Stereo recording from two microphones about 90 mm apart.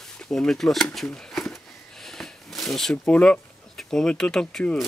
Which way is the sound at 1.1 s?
5° left (ahead or behind).